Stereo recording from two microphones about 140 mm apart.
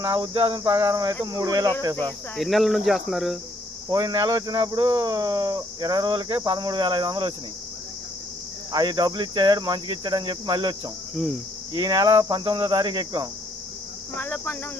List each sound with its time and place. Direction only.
0.0 s speech: 25° right (ahead or behind)
2.3 s speech: centre (ahead or behind)
3.8 s speech: 30° right (ahead or behind)
8.7 s speech: 30° right (ahead or behind)
11.1 s cricket: centre (ahead or behind)
11.7 s speech: 30° right (ahead or behind)
14.2 s speech: 15° left (ahead or behind)